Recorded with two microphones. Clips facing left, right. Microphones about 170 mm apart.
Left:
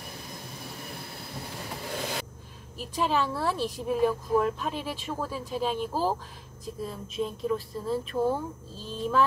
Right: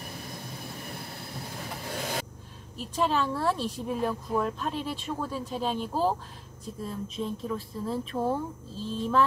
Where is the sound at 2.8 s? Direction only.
5° left (ahead or behind).